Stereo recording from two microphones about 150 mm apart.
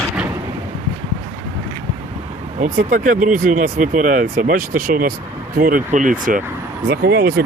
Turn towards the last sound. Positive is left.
turn(degrees=-85)